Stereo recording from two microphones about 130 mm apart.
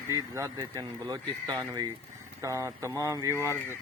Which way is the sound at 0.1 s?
25° right (ahead or behind).